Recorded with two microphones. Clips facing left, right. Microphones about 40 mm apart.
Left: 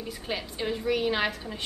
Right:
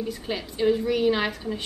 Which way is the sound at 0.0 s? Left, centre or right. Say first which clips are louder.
Right 4 dB; centre.